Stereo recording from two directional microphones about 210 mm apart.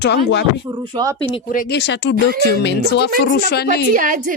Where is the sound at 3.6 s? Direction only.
40° right (ahead or behind).